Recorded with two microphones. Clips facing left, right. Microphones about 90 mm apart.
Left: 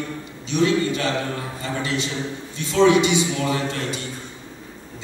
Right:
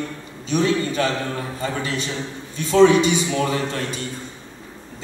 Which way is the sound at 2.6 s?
40° right (ahead or behind).